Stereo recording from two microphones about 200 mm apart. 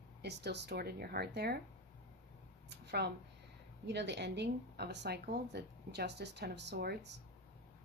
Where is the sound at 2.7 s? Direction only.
60° right (ahead or behind).